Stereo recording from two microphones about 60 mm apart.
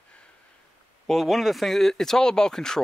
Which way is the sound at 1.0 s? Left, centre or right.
Centre.